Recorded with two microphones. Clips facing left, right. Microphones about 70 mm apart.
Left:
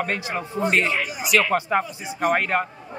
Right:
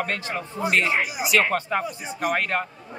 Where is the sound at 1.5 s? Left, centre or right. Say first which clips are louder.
Left 3 dB; centre.